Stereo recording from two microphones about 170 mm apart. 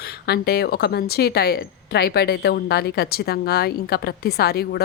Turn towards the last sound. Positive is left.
turn(degrees=70)  # may be behind; listen again after turning